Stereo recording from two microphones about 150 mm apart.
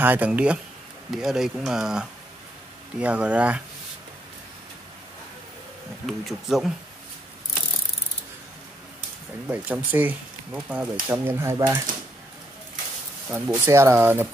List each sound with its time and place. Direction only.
0.0 s speech: 10° right (ahead or behind)
6.0 s speech: centre (ahead or behind)
9.5 s speech: 10° right (ahead or behind)
13.5 s speech: 20° right (ahead or behind)